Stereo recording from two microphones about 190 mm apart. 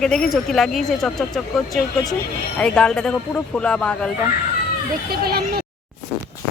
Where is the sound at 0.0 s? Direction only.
Centre (ahead or behind).